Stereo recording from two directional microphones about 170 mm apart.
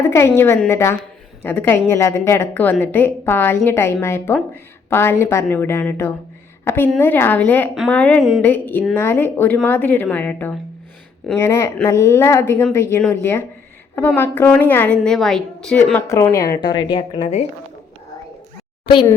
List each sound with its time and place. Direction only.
0.0 s a woman's voice: 15° left (ahead or behind)
16.0 s a woman's voice: 15° left (ahead or behind)
16.6 s a woman's voice: 25° left (ahead or behind)